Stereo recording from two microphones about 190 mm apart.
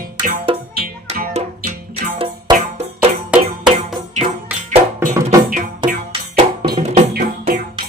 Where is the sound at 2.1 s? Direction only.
30° right (ahead or behind).